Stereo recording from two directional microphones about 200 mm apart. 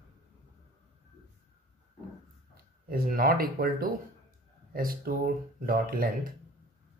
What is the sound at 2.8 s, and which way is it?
Speech, 45° right (ahead or behind).